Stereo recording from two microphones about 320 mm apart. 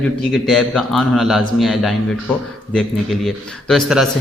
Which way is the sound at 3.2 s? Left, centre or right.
Centre.